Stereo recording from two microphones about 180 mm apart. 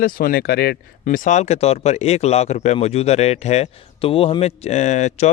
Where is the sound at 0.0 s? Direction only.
55° left (ahead or behind).